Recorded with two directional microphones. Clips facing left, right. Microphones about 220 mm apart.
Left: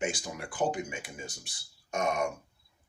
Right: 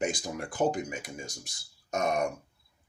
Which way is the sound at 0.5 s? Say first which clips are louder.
Right 2 dB; 40° right (ahead or behind).